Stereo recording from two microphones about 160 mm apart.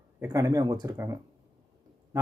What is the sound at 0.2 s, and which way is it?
Speech, 20° right (ahead or behind).